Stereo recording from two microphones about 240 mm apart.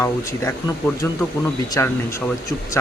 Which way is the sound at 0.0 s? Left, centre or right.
Centre.